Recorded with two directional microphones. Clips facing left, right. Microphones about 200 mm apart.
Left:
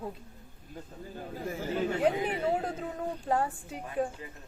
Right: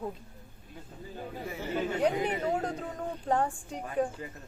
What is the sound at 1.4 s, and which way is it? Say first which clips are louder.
Speech: left 2 dB; 45° left (ahead or behind).